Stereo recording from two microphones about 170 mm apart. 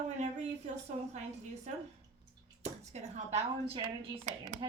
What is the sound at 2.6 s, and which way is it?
Speech, 40° right (ahead or behind).